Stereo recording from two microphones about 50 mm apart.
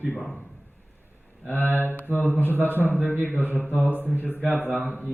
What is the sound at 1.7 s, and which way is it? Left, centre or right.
Speech, right.